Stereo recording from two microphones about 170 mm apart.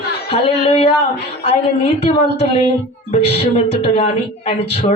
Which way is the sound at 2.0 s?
35° left (ahead or behind).